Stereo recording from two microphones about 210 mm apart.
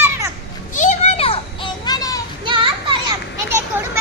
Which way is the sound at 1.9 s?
15° left (ahead or behind).